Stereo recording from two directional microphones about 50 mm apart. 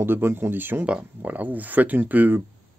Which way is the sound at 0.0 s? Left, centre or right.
Right.